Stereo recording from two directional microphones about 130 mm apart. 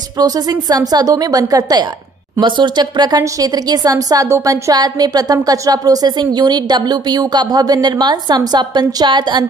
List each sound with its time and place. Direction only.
0.2 s speech: 30° right (ahead or behind)